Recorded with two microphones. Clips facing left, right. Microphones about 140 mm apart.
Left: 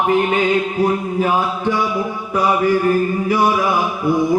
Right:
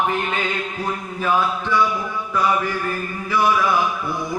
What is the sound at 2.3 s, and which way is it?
Mantra, 40° left (ahead or behind).